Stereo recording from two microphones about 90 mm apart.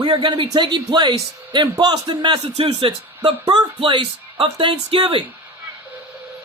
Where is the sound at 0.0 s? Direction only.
55° right (ahead or behind).